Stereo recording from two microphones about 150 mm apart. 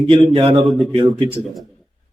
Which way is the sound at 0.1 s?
35° right (ahead or behind).